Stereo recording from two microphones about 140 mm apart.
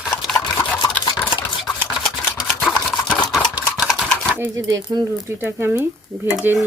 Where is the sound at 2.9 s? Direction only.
5° left (ahead or behind).